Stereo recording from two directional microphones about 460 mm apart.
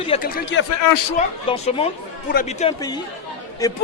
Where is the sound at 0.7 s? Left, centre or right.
Left.